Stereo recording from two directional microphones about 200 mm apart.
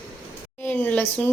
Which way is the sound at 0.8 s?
10° left (ahead or behind).